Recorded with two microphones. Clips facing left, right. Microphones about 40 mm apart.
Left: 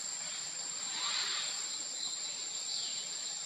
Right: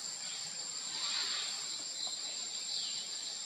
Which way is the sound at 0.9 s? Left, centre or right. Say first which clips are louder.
Left 2 dB; left.